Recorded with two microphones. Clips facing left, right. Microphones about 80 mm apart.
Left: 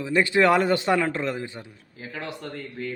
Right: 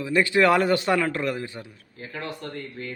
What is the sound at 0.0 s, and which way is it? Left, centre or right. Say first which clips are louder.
A man's voice: even; left.